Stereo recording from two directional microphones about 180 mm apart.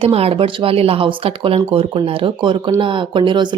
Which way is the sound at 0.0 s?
30° right (ahead or behind).